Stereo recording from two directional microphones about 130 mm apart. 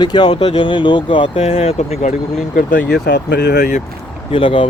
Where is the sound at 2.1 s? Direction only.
90° left.